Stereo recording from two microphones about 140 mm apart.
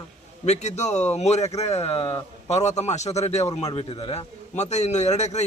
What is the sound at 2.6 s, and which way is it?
Speech, 55° left (ahead or behind).